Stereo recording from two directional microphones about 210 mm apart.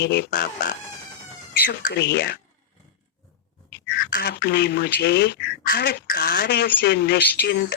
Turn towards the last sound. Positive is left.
turn(degrees=50)  # may be behind; listen again after turning